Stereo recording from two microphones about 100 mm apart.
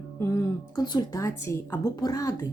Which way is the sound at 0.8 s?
45° left (ahead or behind).